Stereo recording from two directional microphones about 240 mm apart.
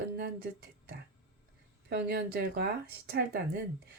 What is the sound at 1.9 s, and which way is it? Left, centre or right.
Speech, right.